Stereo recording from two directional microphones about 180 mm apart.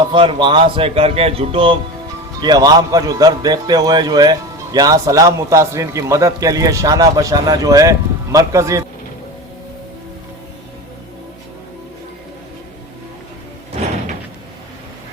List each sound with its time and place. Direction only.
0.0 s a man's voice: 30° right (ahead or behind)